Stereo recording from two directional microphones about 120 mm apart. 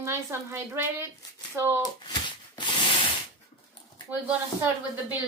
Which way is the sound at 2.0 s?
40° left (ahead or behind).